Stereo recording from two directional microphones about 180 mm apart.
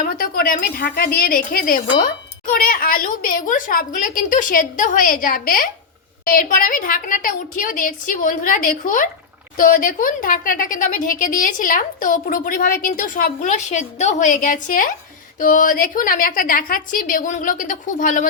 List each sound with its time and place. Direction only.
0.0 s a woman's voice: 55° left (ahead or behind)